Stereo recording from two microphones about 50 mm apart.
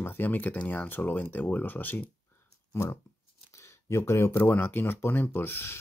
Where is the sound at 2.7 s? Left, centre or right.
Left.